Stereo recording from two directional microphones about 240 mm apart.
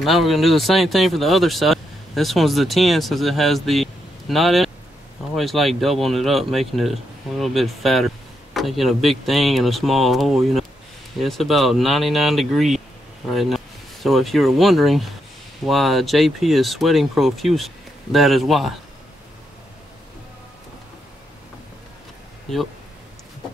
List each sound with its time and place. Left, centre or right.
0.0 s speech: centre
22.5 s speech: centre